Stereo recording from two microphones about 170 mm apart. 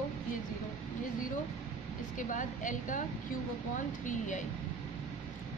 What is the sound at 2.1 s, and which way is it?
Speech, 50° left (ahead or behind).